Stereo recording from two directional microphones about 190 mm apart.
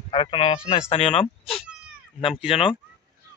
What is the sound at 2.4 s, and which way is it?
Speech, 30° left (ahead or behind).